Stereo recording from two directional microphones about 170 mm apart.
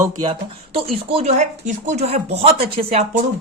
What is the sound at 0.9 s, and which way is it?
A man's voice, 40° right (ahead or behind).